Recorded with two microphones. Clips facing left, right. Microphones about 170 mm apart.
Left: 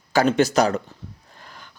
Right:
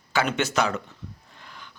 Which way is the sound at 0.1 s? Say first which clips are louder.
Left 7 dB; 40° left (ahead or behind).